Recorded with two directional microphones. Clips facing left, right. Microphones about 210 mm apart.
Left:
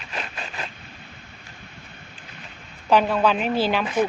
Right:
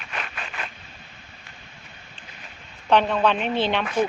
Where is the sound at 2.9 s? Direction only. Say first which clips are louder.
Left 1 dB; 5° left (ahead or behind).